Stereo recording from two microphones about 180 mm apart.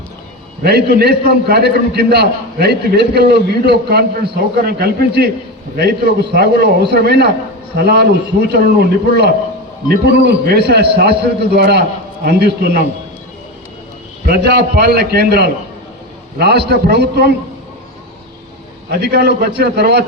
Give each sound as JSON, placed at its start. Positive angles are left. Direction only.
{"t": 0.6, "sound": "a man's voice", "side_deg": -65}
{"t": 14.3, "sound": "a man's voice", "side_deg": -60}
{"t": 18.9, "sound": "a man's voice", "side_deg": -60}